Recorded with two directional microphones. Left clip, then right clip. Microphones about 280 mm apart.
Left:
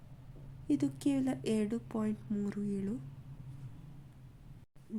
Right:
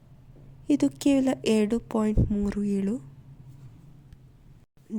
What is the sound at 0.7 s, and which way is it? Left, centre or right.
Speech, right.